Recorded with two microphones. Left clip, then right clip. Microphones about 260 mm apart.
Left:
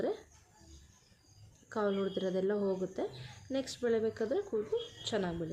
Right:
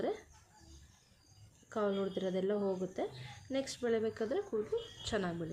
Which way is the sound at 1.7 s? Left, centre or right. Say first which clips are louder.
Left 2 dB; centre.